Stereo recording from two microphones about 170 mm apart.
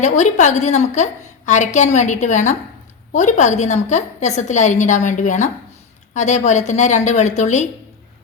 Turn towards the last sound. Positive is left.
turn(degrees=45)  # may be behind; listen again after turning